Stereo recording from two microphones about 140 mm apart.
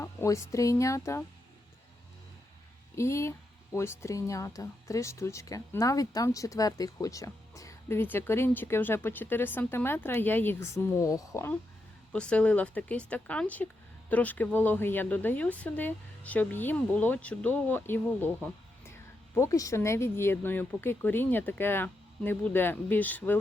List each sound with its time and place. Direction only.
0.0 s speech: 20° left (ahead or behind)
2.9 s speech: 20° left (ahead or behind)
12.1 s speech: 5° left (ahead or behind)